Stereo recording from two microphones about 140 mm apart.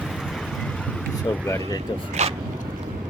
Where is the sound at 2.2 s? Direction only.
55° right (ahead or behind).